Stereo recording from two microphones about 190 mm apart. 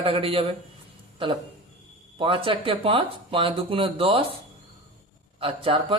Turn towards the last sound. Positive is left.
turn(degrees=-30)  # may be behind; listen again after turning